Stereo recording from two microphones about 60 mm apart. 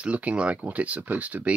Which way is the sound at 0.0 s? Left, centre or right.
Right.